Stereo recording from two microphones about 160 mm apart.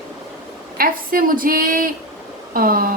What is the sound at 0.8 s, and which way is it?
A woman's voice, 65° right (ahead or behind).